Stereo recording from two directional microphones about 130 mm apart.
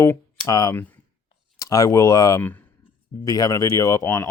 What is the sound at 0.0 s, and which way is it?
Speech, 25° left (ahead or behind).